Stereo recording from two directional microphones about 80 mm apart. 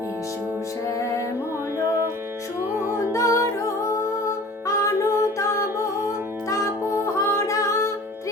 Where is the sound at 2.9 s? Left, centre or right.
Left.